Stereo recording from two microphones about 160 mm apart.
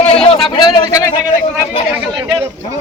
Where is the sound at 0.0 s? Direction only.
40° left (ahead or behind).